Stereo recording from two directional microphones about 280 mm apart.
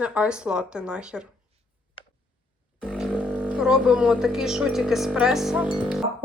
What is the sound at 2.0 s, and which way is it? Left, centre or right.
Tick, centre.